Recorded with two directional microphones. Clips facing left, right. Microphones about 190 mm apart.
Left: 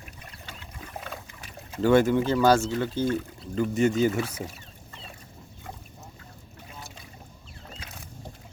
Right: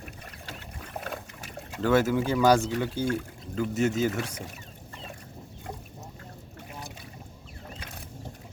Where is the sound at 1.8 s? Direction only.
5° right (ahead or behind).